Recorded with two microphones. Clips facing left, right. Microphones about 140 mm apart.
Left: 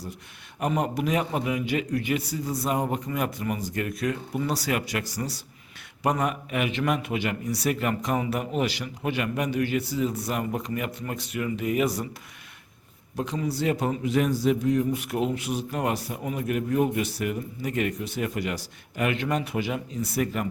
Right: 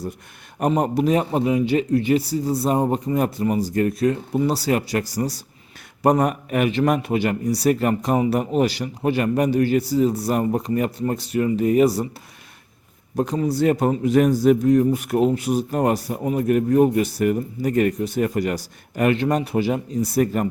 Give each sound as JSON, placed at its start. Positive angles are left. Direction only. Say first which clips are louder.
{"t": 0.6, "sound": "a man's voice", "louder": "right 7 dB", "side_deg": -35}
{"t": 13.1, "sound": "a man's voice", "louder": "right 7 dB", "side_deg": -40}